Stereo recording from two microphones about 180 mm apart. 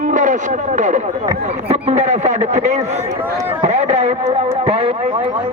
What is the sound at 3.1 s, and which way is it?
Speech, 15° right (ahead or behind).